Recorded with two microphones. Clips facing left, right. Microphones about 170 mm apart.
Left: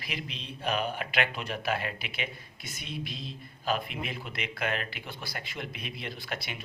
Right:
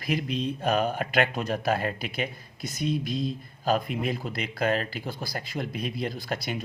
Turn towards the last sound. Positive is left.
turn(degrees=-40)  # may be behind; listen again after turning